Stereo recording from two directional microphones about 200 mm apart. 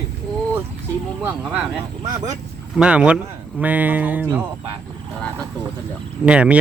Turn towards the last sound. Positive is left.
turn(degrees=-5)  # may be behind; listen again after turning